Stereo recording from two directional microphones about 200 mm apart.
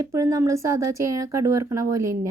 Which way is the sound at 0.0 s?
15° right (ahead or behind).